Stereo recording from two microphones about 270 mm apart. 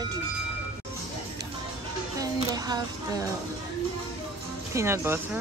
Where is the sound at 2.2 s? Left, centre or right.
Centre.